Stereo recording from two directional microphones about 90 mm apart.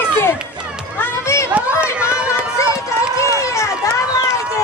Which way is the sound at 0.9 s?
30° left (ahead or behind).